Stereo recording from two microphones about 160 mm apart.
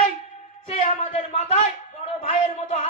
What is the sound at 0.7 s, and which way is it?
A man's voice, 45° left (ahead or behind).